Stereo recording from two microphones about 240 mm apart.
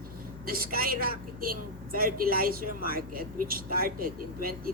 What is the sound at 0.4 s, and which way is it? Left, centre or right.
A woman's voice, right.